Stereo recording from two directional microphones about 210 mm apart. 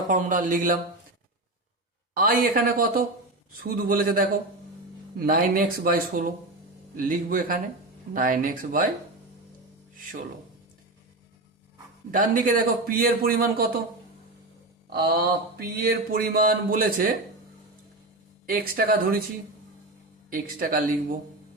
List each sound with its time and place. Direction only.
0.1 s speech: 40° right (ahead or behind)
2.1 s a man's voice: 45° right (ahead or behind)
12.1 s a man's voice: 40° right (ahead or behind)
14.9 s a man's voice: 45° right (ahead or behind)
18.4 s a man's voice: 45° right (ahead or behind)
20.3 s a man's voice: 45° right (ahead or behind)